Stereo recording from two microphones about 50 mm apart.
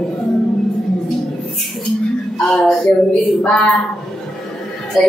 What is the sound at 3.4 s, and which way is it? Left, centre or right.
Speech, left.